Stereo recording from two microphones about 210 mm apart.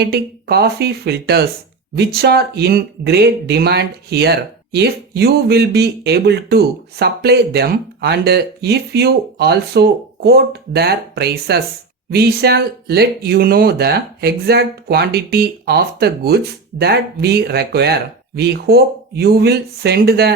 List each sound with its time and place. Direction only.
0.0 s speech: 50° right (ahead or behind)